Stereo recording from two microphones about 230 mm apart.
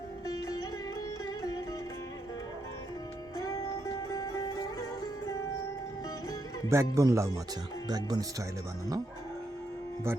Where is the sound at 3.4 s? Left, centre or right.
Centre.